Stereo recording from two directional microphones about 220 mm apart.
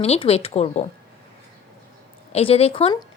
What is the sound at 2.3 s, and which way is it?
Speech, 25° left (ahead or behind).